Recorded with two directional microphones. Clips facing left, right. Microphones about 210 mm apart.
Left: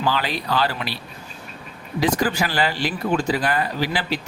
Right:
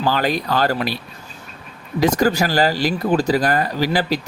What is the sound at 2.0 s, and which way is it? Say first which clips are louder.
Speech: right 4 dB; 45° right (ahead or behind).